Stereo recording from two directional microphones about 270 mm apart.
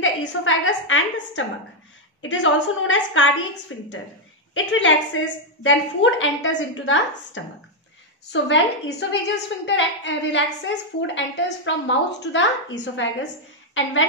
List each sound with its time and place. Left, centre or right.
0.0 s a woman's voice: left